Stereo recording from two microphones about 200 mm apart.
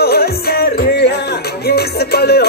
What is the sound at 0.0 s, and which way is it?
Music, 50° left (ahead or behind).